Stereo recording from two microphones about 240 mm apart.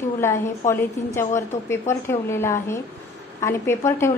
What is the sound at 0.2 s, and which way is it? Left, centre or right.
A woman's voice, centre.